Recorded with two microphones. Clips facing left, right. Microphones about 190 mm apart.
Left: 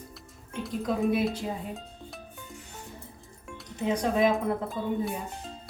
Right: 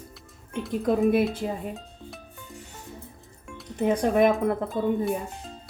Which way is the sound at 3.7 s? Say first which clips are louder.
Right 5 dB; 55° right (ahead or behind).